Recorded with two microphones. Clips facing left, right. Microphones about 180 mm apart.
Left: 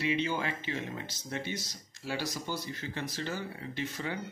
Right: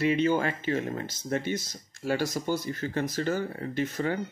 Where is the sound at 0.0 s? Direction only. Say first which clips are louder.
Right 7 dB; 50° right (ahead or behind).